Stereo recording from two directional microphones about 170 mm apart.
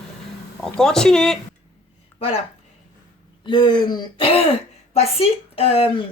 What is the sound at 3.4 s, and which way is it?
A woman's voice, 25° left (ahead or behind).